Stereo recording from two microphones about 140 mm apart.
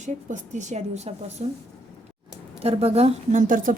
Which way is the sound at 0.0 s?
60° right (ahead or behind).